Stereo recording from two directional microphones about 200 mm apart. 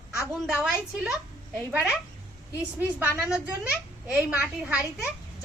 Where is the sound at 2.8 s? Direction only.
10° right (ahead or behind).